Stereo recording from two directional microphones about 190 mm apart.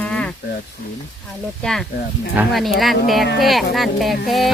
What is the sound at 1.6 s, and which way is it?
Speech, centre (ahead or behind).